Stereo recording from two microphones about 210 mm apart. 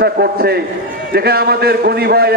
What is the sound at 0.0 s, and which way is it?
A man's voice, 50° right (ahead or behind).